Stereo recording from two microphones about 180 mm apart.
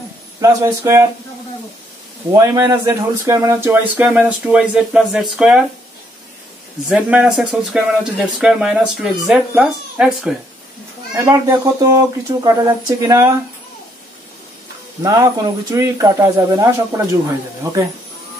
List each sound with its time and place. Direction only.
0.4 s speech: 15° right (ahead or behind)
2.3 s speech: 15° right (ahead or behind)
6.9 s speech: 5° right (ahead or behind)
15.0 s speech: 20° right (ahead or behind)